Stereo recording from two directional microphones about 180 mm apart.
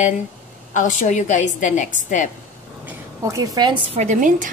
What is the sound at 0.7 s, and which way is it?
A woman's voice, 45° left (ahead or behind).